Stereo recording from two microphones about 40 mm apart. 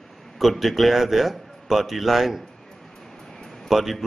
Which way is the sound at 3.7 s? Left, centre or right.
Centre.